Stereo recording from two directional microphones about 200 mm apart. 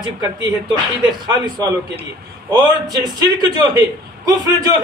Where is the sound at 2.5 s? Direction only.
20° right (ahead or behind).